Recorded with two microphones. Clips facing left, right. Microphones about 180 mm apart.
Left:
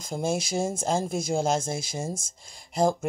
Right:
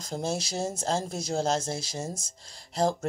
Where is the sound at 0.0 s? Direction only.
10° left (ahead or behind).